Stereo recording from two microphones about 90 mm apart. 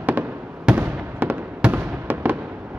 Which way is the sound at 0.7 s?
15° right (ahead or behind).